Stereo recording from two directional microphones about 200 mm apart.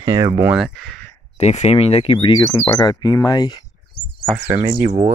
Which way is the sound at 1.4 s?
35° left (ahead or behind).